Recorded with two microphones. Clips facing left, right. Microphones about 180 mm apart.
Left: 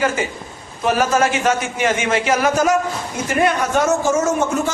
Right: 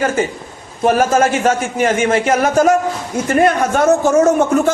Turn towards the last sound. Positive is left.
turn(degrees=-60)  # may be behind; listen again after turning